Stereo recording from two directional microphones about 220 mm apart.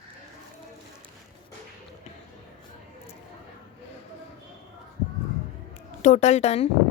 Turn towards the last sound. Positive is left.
turn(degrees=30)  # may be behind; listen again after turning